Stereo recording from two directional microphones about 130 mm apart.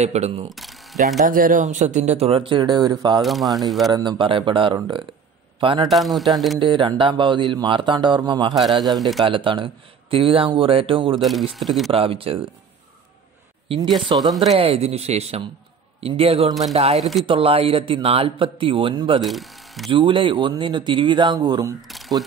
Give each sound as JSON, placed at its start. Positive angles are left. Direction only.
{"t": 0.0, "sound": "speech", "side_deg": -55}
{"t": 1.2, "sound": "a man's voice", "side_deg": -90}
{"t": 3.2, "sound": "speech", "side_deg": 0}
{"t": 3.9, "sound": "a man's voice", "side_deg": -35}
{"t": 5.9, "sound": "speech", "side_deg": 0}
{"t": 6.6, "sound": "a man's voice", "side_deg": -40}
{"t": 8.5, "sound": "speech", "side_deg": 0}
{"t": 9.2, "sound": "a man's voice", "side_deg": -40}
{"t": 11.1, "sound": "speech", "side_deg": 0}
{"t": 11.9, "sound": "a man's voice", "side_deg": -45}
{"t": 14.1, "sound": "a man's voice", "side_deg": -40}
{"t": 19.2, "sound": "speech", "side_deg": 0}
{"t": 19.9, "sound": "a man's voice", "side_deg": -40}